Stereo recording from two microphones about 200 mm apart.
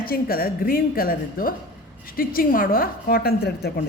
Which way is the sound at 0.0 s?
50° left (ahead or behind).